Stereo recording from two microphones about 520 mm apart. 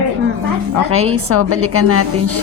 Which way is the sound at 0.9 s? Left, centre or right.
Right.